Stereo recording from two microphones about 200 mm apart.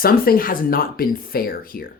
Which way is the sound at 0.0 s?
45° left (ahead or behind).